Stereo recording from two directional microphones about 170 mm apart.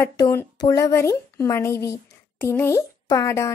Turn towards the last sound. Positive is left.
turn(degrees=15)  # may be behind; listen again after turning